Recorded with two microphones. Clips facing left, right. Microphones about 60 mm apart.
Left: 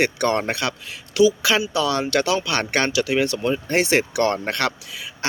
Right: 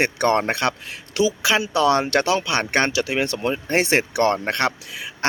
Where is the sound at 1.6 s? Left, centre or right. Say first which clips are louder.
Right 3 dB; right.